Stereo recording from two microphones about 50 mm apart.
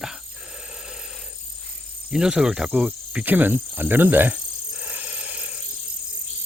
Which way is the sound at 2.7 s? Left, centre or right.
Right.